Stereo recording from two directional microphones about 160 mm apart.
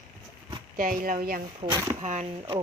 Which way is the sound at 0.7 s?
60° right (ahead or behind).